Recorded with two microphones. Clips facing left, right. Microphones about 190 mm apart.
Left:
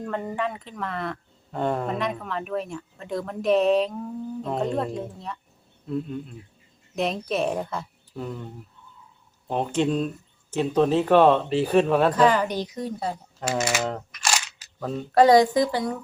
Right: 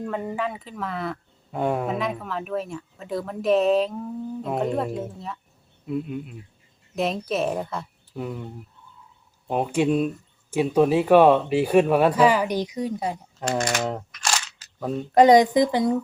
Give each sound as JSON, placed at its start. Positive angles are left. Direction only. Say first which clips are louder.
{"t": 0.0, "sound": "speech", "louder": "right 1 dB", "side_deg": -5}
{"t": 9.5, "sound": "speech", "louder": "right 2 dB", "side_deg": -10}
{"t": 13.4, "sound": "speech", "louder": "right 1 dB", "side_deg": 5}
{"t": 14.2, "sound": "single-lens reflex camera", "louder": "left 2 dB", "side_deg": 10}
{"t": 14.8, "sound": "speech", "louder": "right 2 dB", "side_deg": -10}